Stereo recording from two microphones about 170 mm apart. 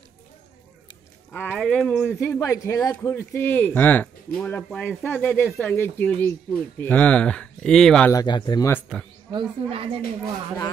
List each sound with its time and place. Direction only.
1.3 s a man's voice: 10° left (ahead or behind)
8.1 s speech: 25° left (ahead or behind)
9.3 s speech: 30° right (ahead or behind)